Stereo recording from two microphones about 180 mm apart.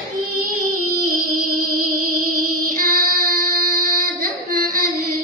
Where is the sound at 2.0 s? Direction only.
50° right (ahead or behind).